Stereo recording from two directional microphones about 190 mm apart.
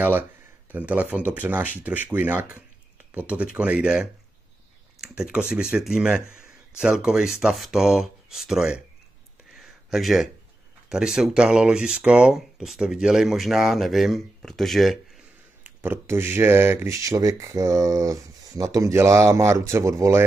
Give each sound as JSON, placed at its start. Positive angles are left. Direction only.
{"t": 0.7, "sound": "speech", "side_deg": -10}
{"t": 5.1, "sound": "speech", "side_deg": -5}
{"t": 9.6, "sound": "a sound", "side_deg": 0}
{"t": 10.9, "sound": "speech", "side_deg": -5}
{"t": 15.6, "sound": "speech", "side_deg": -10}